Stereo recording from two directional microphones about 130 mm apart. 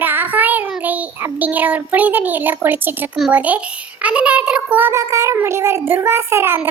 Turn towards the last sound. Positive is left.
turn(degrees=-20)  # may be behind; listen again after turning